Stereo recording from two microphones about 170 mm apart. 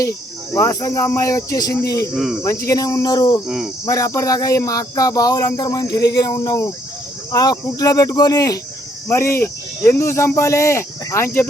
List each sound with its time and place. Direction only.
0.5 s speech: 20° left (ahead or behind)
2.1 s speech: 5° right (ahead or behind)
2.6 s speech: 20° left (ahead or behind)
3.4 s speech: centre (ahead or behind)
3.8 s speech: 20° left (ahead or behind)